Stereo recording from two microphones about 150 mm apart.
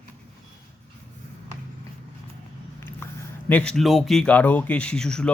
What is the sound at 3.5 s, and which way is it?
Speech, 5° left (ahead or behind).